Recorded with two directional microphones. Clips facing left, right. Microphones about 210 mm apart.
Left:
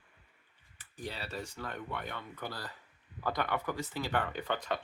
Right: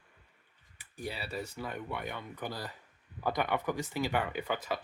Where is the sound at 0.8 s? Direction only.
10° right (ahead or behind).